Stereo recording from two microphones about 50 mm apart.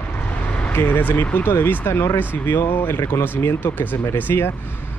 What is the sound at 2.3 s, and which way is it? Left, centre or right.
Speech, left.